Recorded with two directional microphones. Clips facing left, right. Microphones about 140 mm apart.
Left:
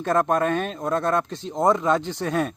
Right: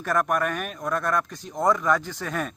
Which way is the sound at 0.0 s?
25° left (ahead or behind).